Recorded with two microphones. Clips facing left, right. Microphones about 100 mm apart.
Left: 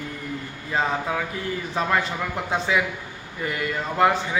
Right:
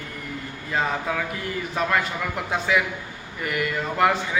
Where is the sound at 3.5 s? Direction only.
25° left (ahead or behind).